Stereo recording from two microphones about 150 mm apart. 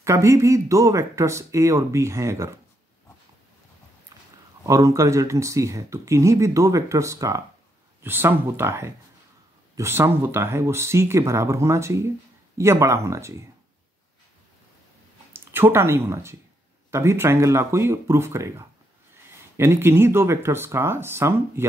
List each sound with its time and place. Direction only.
0.0 s speech: 20° right (ahead or behind)
4.1 s a sound: 20° right (ahead or behind)
4.6 s speech: 20° right (ahead or behind)
15.3 s speech: 15° right (ahead or behind)